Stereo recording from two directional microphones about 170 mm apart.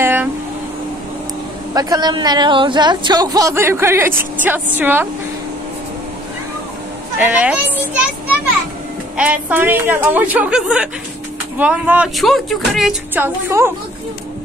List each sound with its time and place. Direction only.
0.0 s vehicle: 10° right (ahead or behind)
1.7 s speech: 20° right (ahead or behind)
7.2 s speech: 10° right (ahead or behind)
9.1 s speech: 10° right (ahead or behind)